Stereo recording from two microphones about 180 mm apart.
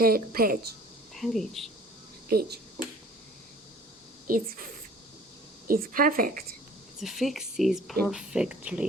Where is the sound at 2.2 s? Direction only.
60° right (ahead or behind).